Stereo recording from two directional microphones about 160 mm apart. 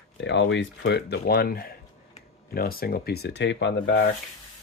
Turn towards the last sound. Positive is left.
turn(degrees=90)